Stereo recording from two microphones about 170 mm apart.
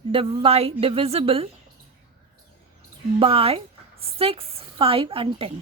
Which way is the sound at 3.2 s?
35° right (ahead or behind).